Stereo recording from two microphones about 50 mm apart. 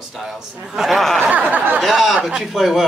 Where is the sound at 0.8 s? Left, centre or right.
Centre.